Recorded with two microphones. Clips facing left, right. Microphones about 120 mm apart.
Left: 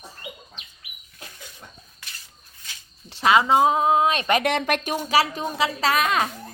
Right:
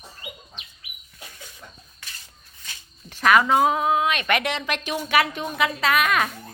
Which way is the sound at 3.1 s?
25° left (ahead or behind).